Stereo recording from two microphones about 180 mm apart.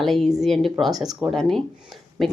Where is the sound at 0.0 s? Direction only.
Centre (ahead or behind).